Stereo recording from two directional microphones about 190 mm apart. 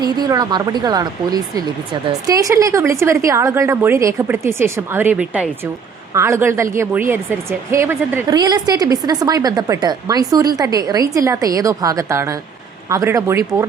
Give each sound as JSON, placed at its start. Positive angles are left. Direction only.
{"t": 0.0, "sound": "speech", "side_deg": -20}